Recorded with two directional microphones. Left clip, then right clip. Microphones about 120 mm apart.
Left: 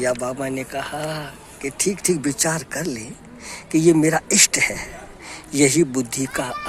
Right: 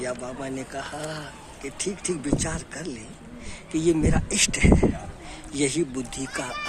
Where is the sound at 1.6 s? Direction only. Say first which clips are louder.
Left 8 dB; 45° left (ahead or behind).